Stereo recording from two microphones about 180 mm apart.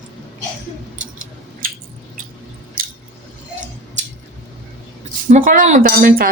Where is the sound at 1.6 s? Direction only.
50° right (ahead or behind).